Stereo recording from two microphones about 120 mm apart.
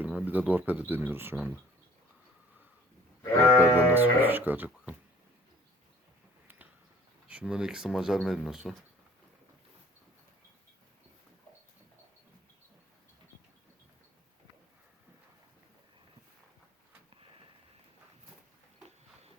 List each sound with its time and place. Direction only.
0.0 s speech: 10° right (ahead or behind)
3.4 s sheep: 20° left (ahead or behind)
3.9 s speech: 15° right (ahead or behind)
7.3 s speech: 10° right (ahead or behind)